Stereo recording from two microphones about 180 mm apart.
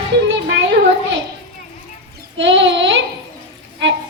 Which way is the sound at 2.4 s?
90° right.